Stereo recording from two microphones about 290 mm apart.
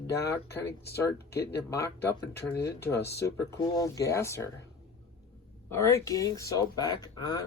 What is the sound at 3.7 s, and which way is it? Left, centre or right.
Speech, centre.